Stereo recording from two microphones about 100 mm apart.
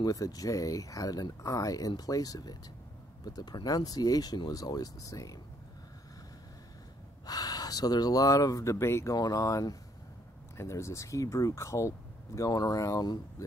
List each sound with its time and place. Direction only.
0.0 s speech: 35° left (ahead or behind)
7.2 s speech: 40° left (ahead or behind)
9.1 s speech: 40° left (ahead or behind)